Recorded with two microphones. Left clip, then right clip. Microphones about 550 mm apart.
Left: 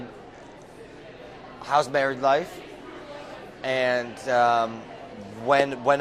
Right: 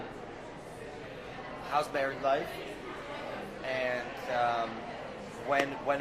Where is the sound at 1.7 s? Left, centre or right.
Left.